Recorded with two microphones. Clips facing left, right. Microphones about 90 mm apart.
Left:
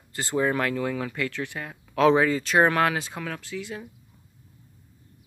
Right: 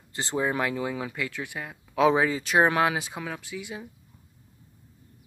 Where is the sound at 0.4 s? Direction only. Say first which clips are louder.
Left 2 dB; 15° right (ahead or behind).